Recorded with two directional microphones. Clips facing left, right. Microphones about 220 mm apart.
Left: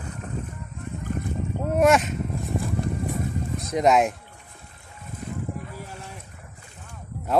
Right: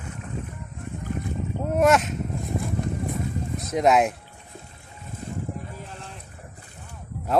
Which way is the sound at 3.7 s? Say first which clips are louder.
Even; centre (ahead or behind).